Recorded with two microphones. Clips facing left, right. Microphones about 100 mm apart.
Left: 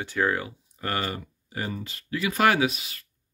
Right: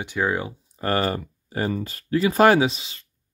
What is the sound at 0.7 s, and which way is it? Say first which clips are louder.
Speech: right 7 dB; 35° right (ahead or behind).